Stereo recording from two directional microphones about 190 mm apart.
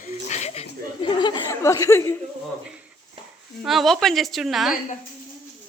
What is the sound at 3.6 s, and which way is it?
A woman's voice, centre (ahead or behind).